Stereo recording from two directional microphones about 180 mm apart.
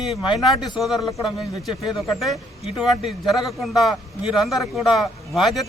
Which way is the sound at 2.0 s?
Centre (ahead or behind).